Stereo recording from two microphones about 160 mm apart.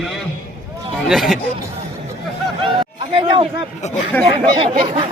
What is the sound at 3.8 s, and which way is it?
Speech, 45° left (ahead or behind).